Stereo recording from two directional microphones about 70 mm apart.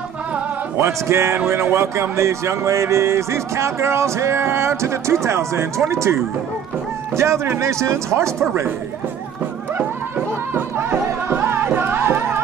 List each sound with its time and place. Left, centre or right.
0.7 s speech: right
7.2 s speech: right
9.8 s music: right